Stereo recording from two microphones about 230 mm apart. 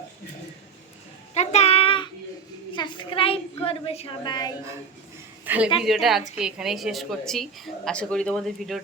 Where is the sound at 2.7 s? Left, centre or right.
Left.